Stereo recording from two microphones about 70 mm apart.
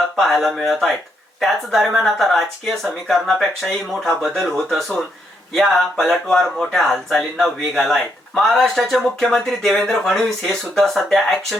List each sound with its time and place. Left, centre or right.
0.2 s speech: centre